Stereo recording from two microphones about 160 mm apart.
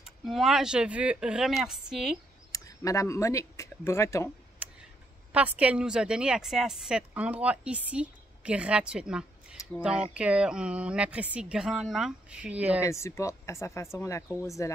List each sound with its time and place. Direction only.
0.0 s a woman's voice: centre (ahead or behind)
2.5 s speech: 20° left (ahead or behind)
4.6 s tick: 10° right (ahead or behind)
5.3 s a woman's voice: 10° right (ahead or behind)
12.8 s speech: 15° left (ahead or behind)